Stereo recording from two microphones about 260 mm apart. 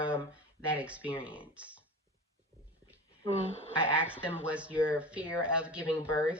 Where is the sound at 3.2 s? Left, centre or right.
Left.